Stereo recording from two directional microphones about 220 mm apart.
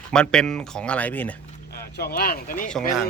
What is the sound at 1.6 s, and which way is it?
Speech, 45° left (ahead or behind).